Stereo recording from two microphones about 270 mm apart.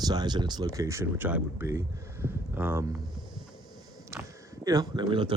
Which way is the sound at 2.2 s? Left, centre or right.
Centre.